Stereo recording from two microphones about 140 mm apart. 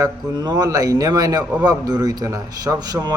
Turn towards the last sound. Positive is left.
turn(degrees=-25)  # may be behind; listen again after turning